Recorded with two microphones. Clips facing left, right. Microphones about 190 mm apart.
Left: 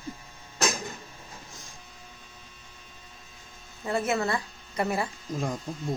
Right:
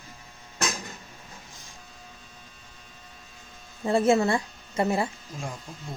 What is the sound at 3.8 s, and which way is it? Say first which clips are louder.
Speech: right 6 dB; 30° right (ahead or behind).